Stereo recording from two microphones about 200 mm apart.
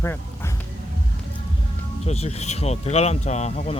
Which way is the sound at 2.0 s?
30° left (ahead or behind).